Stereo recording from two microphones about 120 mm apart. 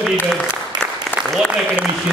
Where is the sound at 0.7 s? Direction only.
35° right (ahead or behind).